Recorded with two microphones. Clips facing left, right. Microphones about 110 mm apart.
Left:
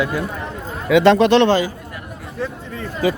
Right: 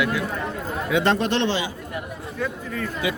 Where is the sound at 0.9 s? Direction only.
90° left.